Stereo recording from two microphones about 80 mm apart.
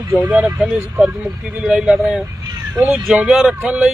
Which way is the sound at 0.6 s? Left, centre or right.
Centre.